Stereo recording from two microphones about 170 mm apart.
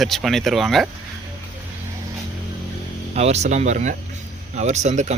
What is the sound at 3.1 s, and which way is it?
Speech, 40° right (ahead or behind).